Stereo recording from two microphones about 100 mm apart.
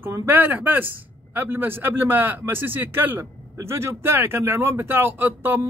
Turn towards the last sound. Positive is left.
turn(degrees=-20)  # may be behind; listen again after turning